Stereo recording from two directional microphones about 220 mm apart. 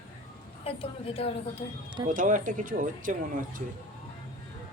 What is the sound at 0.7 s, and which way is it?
Speech, 25° left (ahead or behind).